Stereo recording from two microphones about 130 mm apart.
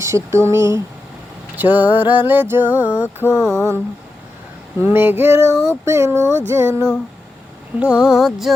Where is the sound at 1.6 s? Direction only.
15° right (ahead or behind).